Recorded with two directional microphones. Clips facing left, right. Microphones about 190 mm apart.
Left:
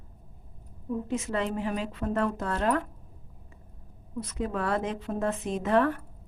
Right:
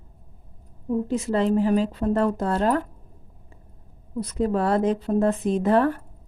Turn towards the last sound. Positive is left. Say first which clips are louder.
# right 5 dB
turn(degrees=-35)  # may be behind; listen again after turning